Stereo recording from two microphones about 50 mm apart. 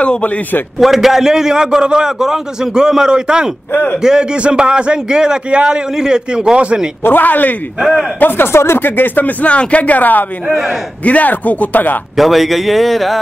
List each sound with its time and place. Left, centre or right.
0.0 s a sound: left
0.7 s a man's voice: centre
3.7 s speech: left
4.0 s a man's voice: centre
7.0 s speech: left
7.8 s a man's voice: centre
8.2 s speech: left
12.2 s a man's voice: centre